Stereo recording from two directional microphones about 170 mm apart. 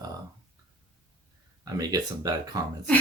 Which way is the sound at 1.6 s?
20° right (ahead or behind).